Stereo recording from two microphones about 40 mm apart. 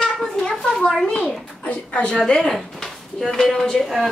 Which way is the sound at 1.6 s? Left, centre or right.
Left.